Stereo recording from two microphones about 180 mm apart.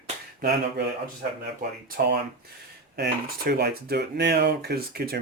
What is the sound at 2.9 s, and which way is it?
Speech, 65° right (ahead or behind).